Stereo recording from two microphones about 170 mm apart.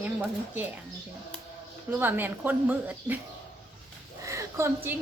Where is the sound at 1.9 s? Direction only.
10° right (ahead or behind).